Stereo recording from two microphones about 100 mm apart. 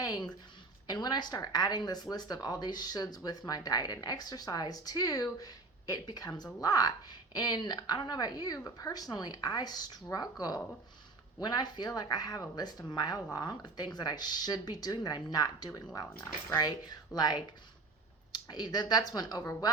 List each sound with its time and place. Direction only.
0.9 s a woman's voice: 45° left (ahead or behind)